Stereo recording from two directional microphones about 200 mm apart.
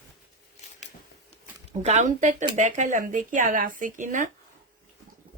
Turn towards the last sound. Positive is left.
turn(degrees=-40)  # may be behind; listen again after turning